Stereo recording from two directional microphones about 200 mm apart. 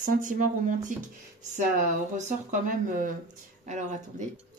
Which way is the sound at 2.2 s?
40° right (ahead or behind).